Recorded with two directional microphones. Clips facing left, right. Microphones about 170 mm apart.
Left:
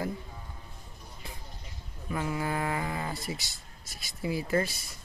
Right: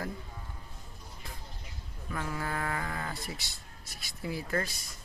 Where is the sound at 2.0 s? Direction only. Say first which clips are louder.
Left 4 dB; 10° left (ahead or behind).